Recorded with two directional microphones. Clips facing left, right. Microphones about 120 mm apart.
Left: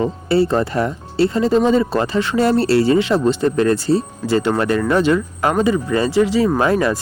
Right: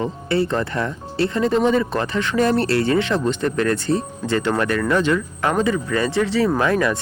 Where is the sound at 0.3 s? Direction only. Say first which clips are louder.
Left 5 dB; 25° left (ahead or behind).